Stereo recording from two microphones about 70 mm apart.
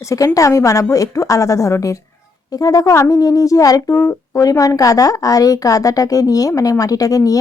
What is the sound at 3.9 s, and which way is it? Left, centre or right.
Speech, left.